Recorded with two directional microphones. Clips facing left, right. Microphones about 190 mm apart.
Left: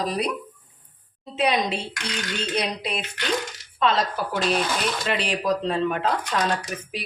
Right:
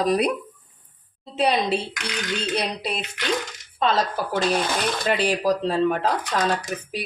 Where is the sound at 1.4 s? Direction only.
35° right (ahead or behind).